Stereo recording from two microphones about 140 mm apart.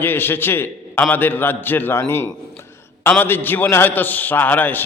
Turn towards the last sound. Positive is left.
turn(degrees=15)  # may be behind; listen again after turning